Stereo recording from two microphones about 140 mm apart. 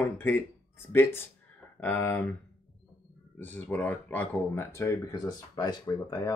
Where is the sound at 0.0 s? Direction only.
15° left (ahead or behind).